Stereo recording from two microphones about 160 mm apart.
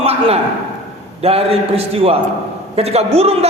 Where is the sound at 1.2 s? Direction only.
40° right (ahead or behind).